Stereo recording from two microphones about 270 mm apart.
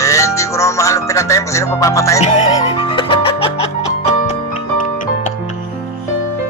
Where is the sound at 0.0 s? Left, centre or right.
Centre.